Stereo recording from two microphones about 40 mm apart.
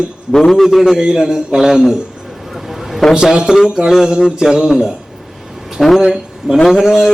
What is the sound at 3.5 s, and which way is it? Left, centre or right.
Speech, centre.